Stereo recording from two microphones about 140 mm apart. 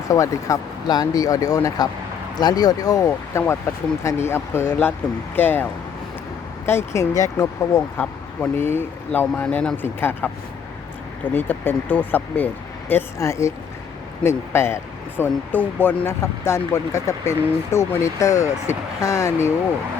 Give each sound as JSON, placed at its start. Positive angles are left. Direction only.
{"t": 0.1, "sound": "speech", "side_deg": 25}
{"t": 6.7, "sound": "speech", "side_deg": 20}
{"t": 11.3, "sound": "speech", "side_deg": 15}